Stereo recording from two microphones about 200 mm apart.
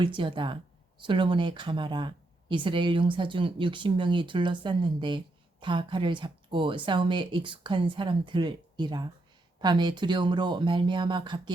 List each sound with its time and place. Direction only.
0.0 s speech: 25° right (ahead or behind)